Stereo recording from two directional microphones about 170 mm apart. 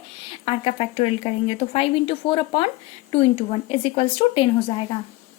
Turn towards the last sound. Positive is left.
turn(degrees=30)  # may be behind; listen again after turning